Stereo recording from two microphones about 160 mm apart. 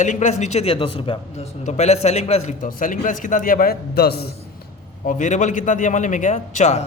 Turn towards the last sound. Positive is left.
turn(degrees=45)  # may be behind; listen again after turning